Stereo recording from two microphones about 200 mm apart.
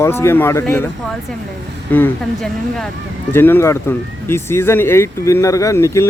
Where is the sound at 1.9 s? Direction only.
10° left (ahead or behind).